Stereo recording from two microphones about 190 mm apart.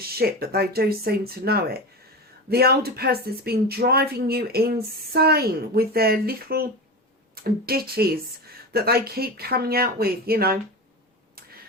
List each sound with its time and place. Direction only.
0.2 s speech: 55° right (ahead or behind)